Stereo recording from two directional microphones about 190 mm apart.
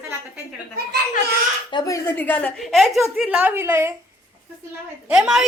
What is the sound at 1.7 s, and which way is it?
A woman's voice, 20° left (ahead or behind).